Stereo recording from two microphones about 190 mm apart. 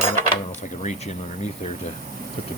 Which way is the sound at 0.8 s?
35° left (ahead or behind).